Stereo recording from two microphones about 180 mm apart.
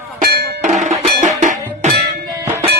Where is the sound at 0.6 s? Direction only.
45° right (ahead or behind).